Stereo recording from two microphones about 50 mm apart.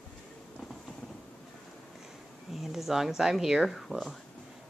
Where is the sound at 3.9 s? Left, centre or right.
Right.